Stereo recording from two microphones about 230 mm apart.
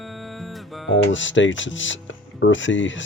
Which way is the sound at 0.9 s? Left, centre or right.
Left.